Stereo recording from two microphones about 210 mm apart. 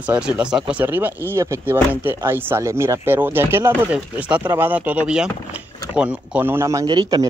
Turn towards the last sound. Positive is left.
turn(degrees=-20)  # may be behind; listen again after turning